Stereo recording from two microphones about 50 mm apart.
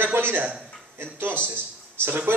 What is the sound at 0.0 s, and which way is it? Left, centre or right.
Speech, right.